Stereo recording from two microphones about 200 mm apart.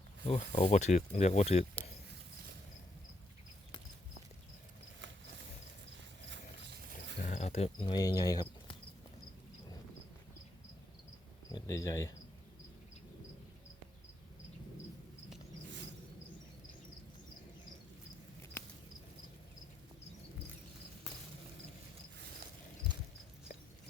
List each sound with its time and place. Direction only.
0.3 s speech: 30° left (ahead or behind)
6.3 s a sound: 60° right (ahead or behind)
7.2 s speech: 35° left (ahead or behind); by 8.7 s 20° left (ahead or behind)
11.5 s speech: 15° left (ahead or behind)